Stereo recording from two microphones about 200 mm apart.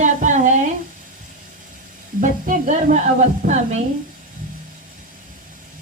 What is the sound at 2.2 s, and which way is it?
Speech, 40° right (ahead or behind).